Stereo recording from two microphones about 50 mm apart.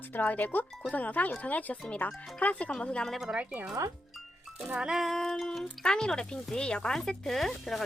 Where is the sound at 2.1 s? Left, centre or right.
Centre.